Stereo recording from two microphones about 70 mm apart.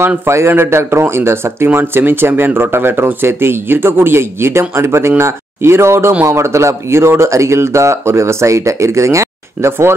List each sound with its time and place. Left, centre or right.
0.3 s speech: right